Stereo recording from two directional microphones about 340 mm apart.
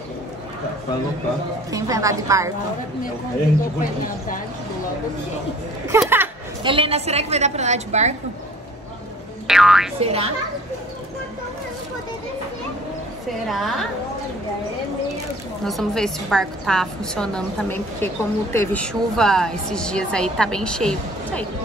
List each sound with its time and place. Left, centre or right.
1.7 s a woman's voice: centre
3.8 s speech: left
5.9 s a woman's voice: centre
9.5 s a woman's voice: centre
10.0 s a woman's voice: centre
13.5 s a woman's voice: centre
15.6 s a woman's voice: centre